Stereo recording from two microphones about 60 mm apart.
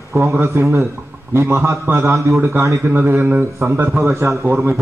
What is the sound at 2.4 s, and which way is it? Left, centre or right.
Speech, right.